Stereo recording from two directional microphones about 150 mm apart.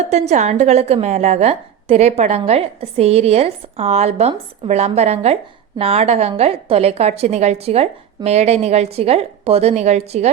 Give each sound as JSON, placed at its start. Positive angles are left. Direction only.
{"t": 0.1, "sound": "a woman's voice", "side_deg": -50}